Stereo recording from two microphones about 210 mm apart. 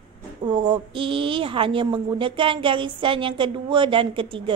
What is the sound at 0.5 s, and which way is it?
A woman's voice, 20° right (ahead or behind).